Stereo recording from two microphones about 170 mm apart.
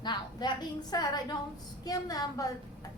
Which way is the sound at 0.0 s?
25° left (ahead or behind).